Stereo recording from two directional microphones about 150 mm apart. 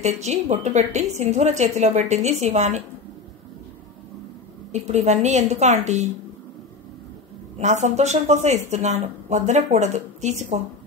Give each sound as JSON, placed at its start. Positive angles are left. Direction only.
{"t": 0.0, "sound": "a woman's voice", "side_deg": -50}
{"t": 4.8, "sound": "a woman's voice", "side_deg": -50}
{"t": 7.5, "sound": "a woman's voice", "side_deg": -50}